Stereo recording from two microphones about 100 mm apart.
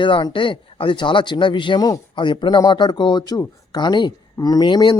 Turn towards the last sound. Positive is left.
turn(degrees=50)  # may be behind; listen again after turning